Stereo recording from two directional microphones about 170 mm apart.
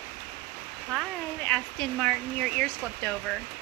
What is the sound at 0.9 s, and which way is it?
Speech, 5° left (ahead or behind).